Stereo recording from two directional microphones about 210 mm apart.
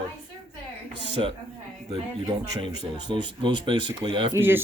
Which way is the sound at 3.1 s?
20° right (ahead or behind).